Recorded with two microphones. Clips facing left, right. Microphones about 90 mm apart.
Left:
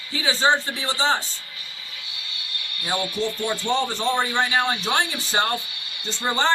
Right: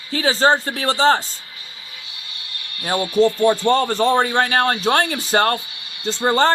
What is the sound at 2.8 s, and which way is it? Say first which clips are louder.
Speech: right 9 dB; 85° right.